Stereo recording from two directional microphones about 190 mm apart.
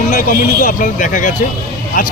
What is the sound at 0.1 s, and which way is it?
A man's voice, 45° left (ahead or behind).